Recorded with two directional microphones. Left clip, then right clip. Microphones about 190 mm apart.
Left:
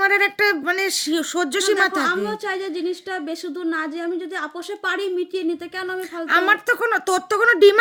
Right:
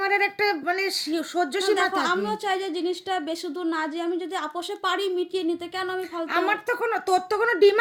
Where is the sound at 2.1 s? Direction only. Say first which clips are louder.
Left 2 dB; centre (ahead or behind).